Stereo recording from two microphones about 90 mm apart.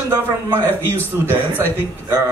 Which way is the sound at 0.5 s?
25° right (ahead or behind).